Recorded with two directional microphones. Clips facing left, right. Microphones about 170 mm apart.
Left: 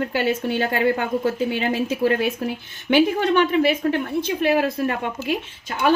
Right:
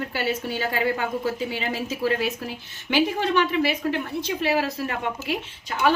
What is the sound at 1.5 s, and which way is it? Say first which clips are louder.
A woman's voice: left 6 dB; 55° left (ahead or behind).